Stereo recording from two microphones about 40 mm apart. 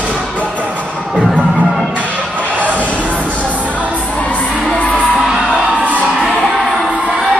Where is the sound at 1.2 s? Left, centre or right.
Centre.